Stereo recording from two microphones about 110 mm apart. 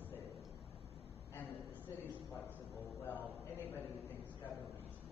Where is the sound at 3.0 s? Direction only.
15° left (ahead or behind).